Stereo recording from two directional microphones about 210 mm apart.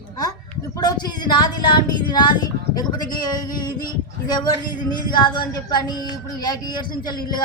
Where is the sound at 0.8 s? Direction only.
20° left (ahead or behind).